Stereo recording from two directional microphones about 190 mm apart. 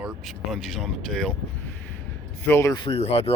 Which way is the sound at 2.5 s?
15° left (ahead or behind).